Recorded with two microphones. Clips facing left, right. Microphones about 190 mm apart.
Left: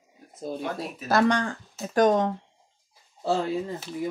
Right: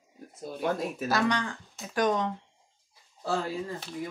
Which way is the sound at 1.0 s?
50° left (ahead or behind).